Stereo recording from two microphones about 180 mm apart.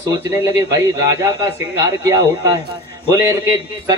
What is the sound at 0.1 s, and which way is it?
A man's voice, 20° right (ahead or behind).